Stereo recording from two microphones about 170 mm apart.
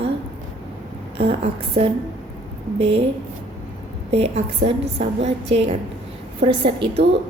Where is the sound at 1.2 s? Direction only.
35° right (ahead or behind).